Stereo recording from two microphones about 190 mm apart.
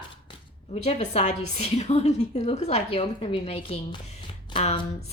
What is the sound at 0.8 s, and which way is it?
A woman's voice, 35° left (ahead or behind).